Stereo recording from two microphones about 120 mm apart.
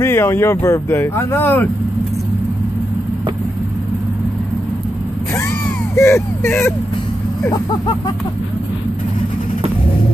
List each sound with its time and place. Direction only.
0.0 s speech: 25° left (ahead or behind)
5.9 s speech: 25° left (ahead or behind)